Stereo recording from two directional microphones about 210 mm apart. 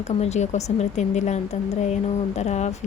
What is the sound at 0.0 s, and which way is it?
A woman's voice, 30° left (ahead or behind).